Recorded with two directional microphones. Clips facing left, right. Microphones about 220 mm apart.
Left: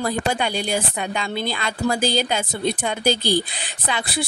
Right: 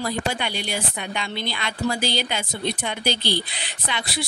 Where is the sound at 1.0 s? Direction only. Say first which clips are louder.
Left 4 dB; 45° left (ahead or behind).